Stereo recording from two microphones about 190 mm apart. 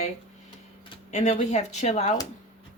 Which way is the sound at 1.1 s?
35° left (ahead or behind).